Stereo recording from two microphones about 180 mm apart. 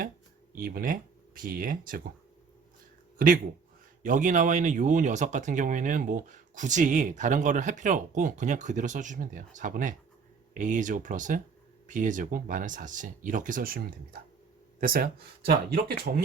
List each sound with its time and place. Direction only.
0.5 s speech: 55° right (ahead or behind)
3.2 s speech: 50° right (ahead or behind)